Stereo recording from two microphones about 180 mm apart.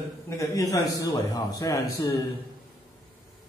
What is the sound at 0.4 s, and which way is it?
Speech, 20° left (ahead or behind).